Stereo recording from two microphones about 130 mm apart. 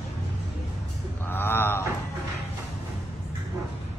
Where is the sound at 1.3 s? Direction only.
15° left (ahead or behind).